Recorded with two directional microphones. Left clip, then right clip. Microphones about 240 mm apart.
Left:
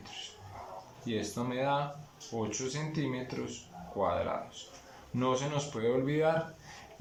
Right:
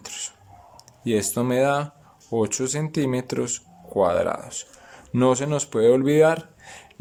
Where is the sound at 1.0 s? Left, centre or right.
Right.